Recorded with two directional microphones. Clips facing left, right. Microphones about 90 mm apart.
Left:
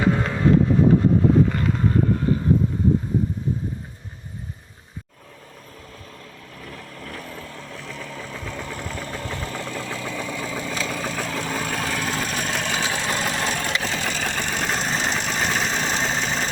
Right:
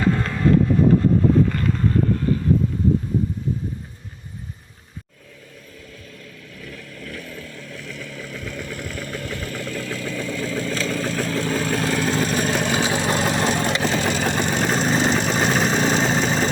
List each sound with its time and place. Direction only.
0.0 s a sound: 15° left (ahead or behind)
6.6 s vehicle: 35° left (ahead or behind); by 13.0 s 10° right (ahead or behind)
13.1 s vehicle: 20° right (ahead or behind)
13.9 s vehicle: 10° right (ahead or behind)